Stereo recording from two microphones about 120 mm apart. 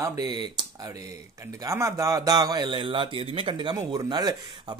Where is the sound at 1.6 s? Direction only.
25° right (ahead or behind).